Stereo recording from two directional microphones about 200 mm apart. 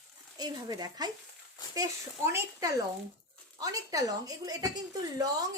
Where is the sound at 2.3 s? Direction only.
15° right (ahead or behind).